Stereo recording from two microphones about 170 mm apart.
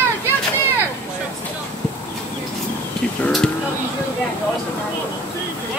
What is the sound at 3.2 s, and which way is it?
Speech, 5° left (ahead or behind).